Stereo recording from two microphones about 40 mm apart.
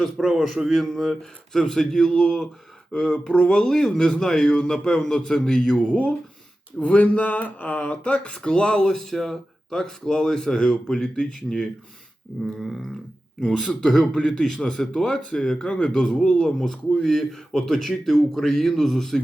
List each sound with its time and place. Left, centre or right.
0.2 s a man's voice: centre
3.9 s a man's voice: centre
6.7 s a sound: left
7.8 s speech: left
8.8 s a man's voice: centre
15.6 s a man's voice: left; by 19.2 s centre